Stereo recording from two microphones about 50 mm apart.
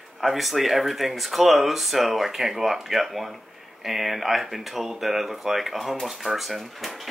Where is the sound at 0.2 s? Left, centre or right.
Centre.